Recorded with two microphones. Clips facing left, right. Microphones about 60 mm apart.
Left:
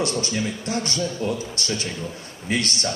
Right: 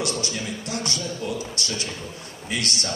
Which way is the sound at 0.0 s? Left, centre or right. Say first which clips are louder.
Left 4 dB; left.